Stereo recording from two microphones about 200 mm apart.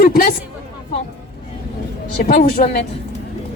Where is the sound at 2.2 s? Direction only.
50° left (ahead or behind).